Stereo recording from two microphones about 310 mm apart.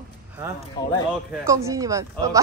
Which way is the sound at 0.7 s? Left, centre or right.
Centre.